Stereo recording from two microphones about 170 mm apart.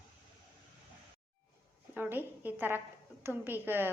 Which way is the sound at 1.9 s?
10° right (ahead or behind).